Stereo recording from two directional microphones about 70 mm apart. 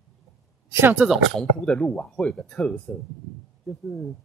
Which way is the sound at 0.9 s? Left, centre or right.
Centre.